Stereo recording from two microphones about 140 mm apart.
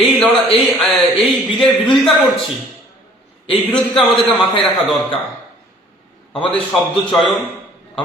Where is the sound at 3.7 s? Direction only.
5° left (ahead or behind).